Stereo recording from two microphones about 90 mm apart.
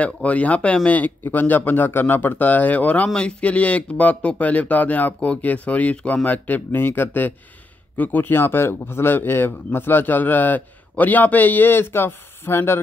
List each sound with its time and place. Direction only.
0.0 s a man's voice: 15° left (ahead or behind)